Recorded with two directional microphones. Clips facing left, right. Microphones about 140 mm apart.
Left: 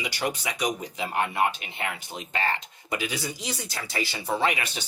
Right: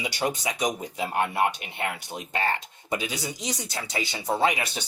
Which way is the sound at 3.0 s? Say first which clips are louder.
Even; 20° right (ahead or behind).